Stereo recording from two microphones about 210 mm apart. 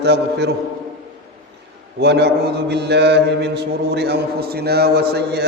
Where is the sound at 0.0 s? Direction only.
55° right (ahead or behind).